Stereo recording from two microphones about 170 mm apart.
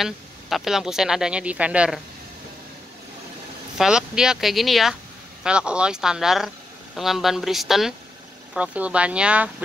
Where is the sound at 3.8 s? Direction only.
5° right (ahead or behind).